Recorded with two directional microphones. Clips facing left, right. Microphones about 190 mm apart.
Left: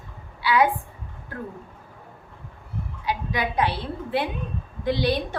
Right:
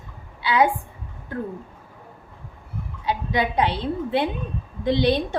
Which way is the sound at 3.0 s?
25° right (ahead or behind).